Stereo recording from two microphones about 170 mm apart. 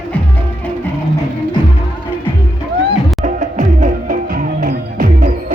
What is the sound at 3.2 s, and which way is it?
Music, 45° right (ahead or behind).